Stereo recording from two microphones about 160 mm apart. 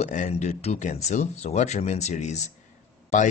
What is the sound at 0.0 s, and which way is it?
Speech, 45° left (ahead or behind).